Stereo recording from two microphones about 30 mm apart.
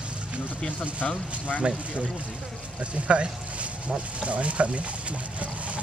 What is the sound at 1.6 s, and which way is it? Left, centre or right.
Speech, right.